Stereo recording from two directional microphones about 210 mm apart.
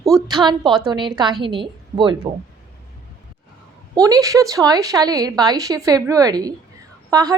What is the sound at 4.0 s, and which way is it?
A woman's voice, 15° right (ahead or behind).